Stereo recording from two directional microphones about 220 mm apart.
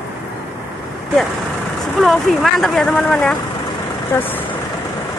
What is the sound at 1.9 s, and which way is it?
Speech, centre (ahead or behind).